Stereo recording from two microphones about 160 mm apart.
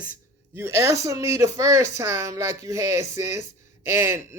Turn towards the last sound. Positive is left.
turn(degrees=-15)  # may be behind; listen again after turning